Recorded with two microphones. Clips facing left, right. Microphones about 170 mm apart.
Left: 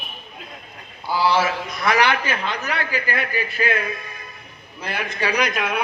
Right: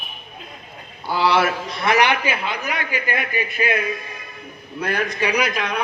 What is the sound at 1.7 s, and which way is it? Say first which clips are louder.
A man's voice: right 1 dB; 25° right (ahead or behind).